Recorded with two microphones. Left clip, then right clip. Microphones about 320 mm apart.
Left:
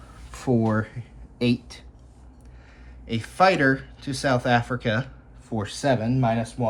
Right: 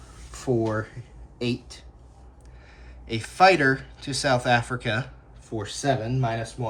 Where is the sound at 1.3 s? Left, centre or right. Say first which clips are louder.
Left 4 dB; centre.